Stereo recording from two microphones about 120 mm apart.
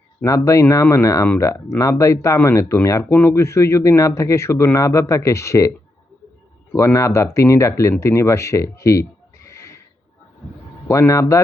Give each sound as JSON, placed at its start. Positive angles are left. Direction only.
{"t": 0.3, "sound": "speech", "side_deg": 25}
{"t": 6.7, "sound": "speech", "side_deg": 25}
{"t": 10.8, "sound": "speech", "side_deg": 25}